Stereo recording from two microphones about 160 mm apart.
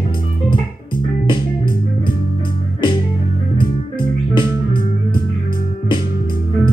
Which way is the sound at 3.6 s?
30° left (ahead or behind).